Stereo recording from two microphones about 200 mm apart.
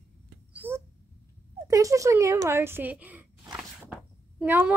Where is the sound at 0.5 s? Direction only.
10° right (ahead or behind).